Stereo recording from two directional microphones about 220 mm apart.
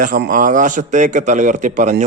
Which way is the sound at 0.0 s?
40° right (ahead or behind).